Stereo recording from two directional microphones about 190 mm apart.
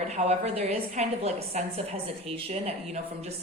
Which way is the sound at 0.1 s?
35° right (ahead or behind).